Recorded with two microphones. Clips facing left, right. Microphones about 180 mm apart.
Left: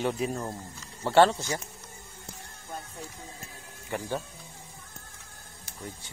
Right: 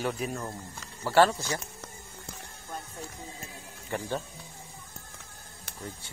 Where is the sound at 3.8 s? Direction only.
15° left (ahead or behind).